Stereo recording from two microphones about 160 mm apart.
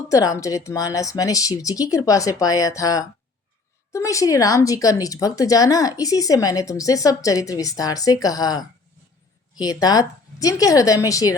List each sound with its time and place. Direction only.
0.1 s a woman's voice: 20° left (ahead or behind)